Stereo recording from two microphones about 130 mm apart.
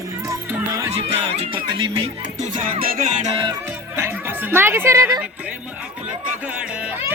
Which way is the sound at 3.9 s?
20° right (ahead or behind).